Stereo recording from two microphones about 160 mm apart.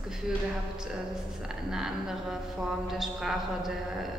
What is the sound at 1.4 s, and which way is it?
Speech, 5° right (ahead or behind).